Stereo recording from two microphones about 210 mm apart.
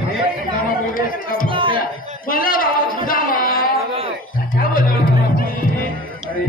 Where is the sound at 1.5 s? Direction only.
25° right (ahead or behind).